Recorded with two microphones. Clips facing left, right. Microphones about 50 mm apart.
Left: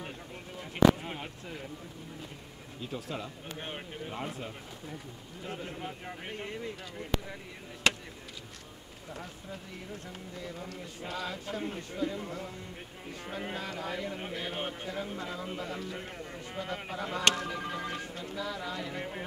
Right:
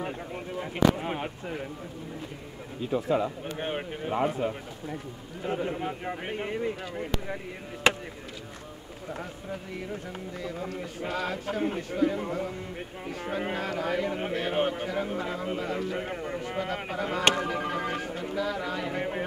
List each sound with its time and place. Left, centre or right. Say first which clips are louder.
0.0 s speech: right 8 dB; right
2.9 s a man's voice: right 13 dB; centre
10.8 s speech: right 5 dB; right
11.9 s speech: right 8 dB; right
12.2 s a man's voice: right 8 dB; right
14.5 s a man's voice: right 10 dB; right
15.1 s speech: right 6 dB; right
16.0 s a man's voice: right 9 dB; right
16.3 s speech: right 4 dB; right
17.5 s a sound: right 6 dB; right
18.1 s speech: right 7 dB; right